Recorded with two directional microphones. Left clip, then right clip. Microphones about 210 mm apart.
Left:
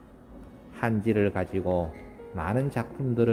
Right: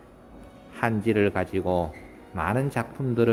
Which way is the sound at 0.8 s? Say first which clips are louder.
Right 3 dB; 5° right (ahead or behind).